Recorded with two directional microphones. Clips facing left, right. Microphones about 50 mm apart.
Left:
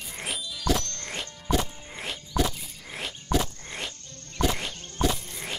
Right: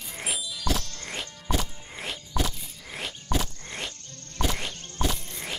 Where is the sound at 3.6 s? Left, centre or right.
Centre.